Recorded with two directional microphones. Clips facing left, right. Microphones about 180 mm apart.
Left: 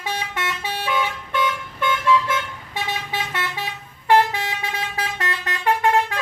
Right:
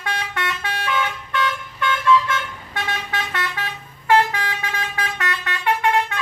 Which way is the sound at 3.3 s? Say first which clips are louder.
Right 1 dB; 10° left (ahead or behind).